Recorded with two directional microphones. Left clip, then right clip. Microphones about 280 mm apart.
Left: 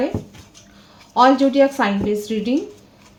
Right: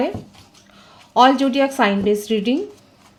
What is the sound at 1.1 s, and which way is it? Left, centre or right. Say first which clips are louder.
Speech: left 1 dB; right.